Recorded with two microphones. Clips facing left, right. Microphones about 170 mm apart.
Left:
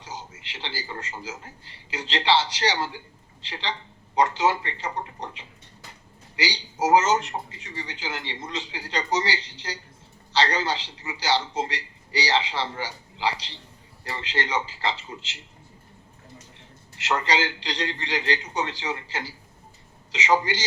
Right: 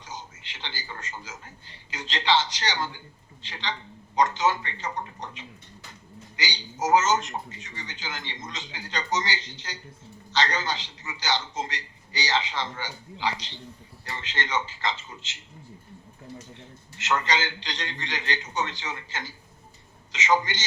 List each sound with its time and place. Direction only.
0.0 s a man's voice: 30° left (ahead or behind)
17.0 s a man's voice: 30° left (ahead or behind)